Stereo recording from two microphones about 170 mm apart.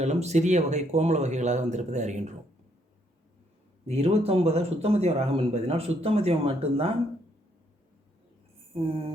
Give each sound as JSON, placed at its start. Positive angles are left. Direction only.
{"t": 0.0, "sound": "speech", "side_deg": -40}
{"t": 3.8, "sound": "a man's voice", "side_deg": -40}